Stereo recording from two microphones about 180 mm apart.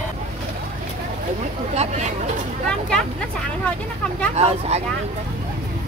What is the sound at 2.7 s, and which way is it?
Speech, 5° left (ahead or behind).